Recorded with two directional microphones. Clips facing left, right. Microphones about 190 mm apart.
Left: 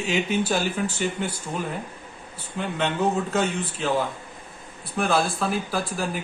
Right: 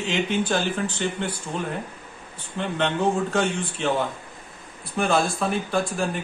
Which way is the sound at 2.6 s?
5° left (ahead or behind).